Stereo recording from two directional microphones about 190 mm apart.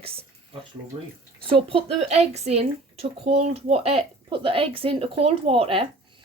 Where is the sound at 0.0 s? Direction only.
30° right (ahead or behind).